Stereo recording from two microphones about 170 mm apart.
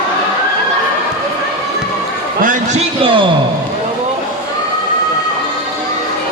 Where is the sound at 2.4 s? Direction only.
50° right (ahead or behind).